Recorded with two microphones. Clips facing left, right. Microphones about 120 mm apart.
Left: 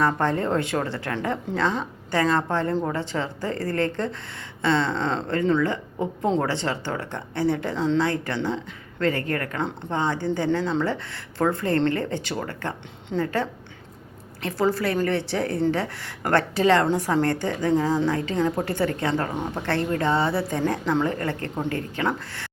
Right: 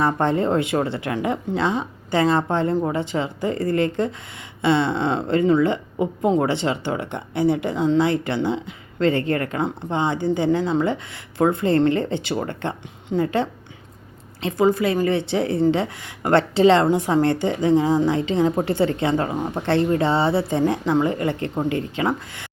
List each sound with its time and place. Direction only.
0.0 s speech: 20° right (ahead or behind)